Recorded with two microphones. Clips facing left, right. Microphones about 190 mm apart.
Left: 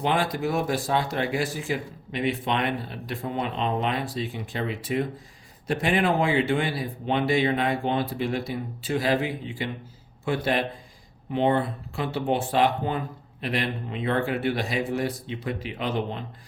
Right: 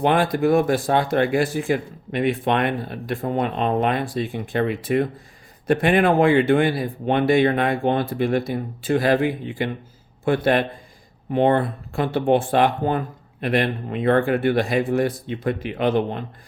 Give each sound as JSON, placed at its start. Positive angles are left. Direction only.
{"t": 0.0, "sound": "speech", "side_deg": -55}